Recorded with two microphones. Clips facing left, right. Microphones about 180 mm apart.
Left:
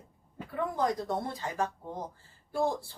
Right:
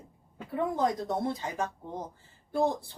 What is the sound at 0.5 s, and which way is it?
Speech, 20° right (ahead or behind).